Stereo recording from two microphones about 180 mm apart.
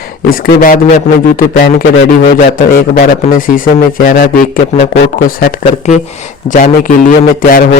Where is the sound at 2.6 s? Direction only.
50° left (ahead or behind).